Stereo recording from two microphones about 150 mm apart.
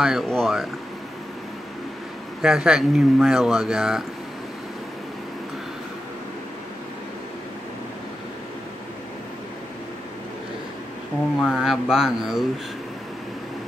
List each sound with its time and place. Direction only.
0.0 s speech: centre (ahead or behind)
2.4 s speech: 5° right (ahead or behind)
11.4 s speech: 5° right (ahead or behind)